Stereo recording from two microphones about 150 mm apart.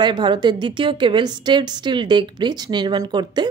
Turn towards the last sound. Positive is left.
turn(degrees=-30)  # may be behind; listen again after turning